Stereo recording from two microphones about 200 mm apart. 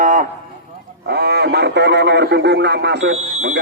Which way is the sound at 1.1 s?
55° right (ahead or behind).